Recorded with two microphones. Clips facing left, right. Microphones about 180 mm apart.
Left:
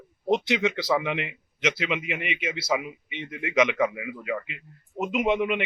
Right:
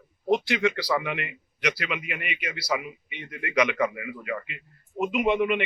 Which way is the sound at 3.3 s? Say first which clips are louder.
Left 2 dB; 5° left (ahead or behind).